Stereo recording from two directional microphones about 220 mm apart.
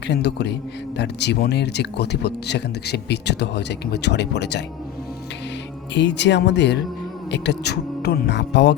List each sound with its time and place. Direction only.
0.1 s speech: 50° left (ahead or behind)
5.9 s speech: 55° left (ahead or behind)